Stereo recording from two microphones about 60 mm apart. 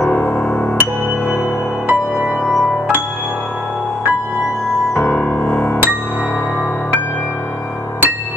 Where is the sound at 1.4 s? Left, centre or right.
Left.